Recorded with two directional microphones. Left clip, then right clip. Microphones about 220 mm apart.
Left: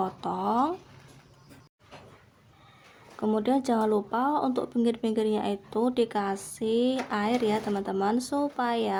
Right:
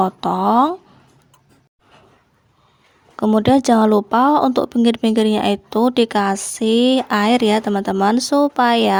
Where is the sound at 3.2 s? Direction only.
40° right (ahead or behind).